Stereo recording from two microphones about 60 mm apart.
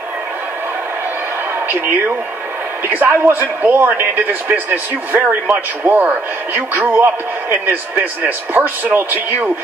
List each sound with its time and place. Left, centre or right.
2.9 s a man's voice: right